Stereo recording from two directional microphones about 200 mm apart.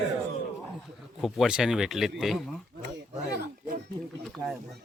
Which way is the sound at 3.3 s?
50° right (ahead or behind).